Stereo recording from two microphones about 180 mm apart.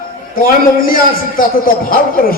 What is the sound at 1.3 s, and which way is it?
A man's voice, 50° left (ahead or behind).